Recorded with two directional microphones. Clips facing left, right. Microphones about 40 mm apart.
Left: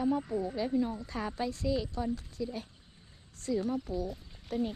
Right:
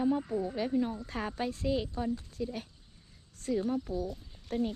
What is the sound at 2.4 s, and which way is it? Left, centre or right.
Speech, right.